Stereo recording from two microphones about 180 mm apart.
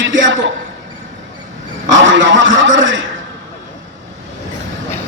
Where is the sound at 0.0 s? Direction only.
90° right.